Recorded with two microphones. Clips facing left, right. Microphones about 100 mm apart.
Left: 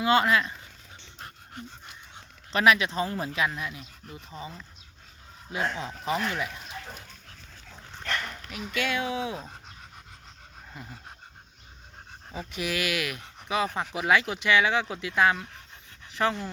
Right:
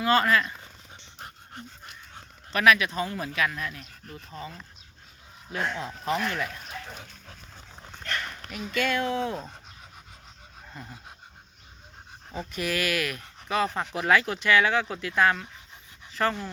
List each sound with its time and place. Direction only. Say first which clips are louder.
0.0 s speech: even; 20° left (ahead or behind)
2.5 s speech: even; 25° left (ahead or behind)
8.4 s speech: right 3 dB; centre (ahead or behind)
10.8 s speech: right 1 dB; 5° left (ahead or behind)
12.3 s speech: right 2 dB; 10° left (ahead or behind)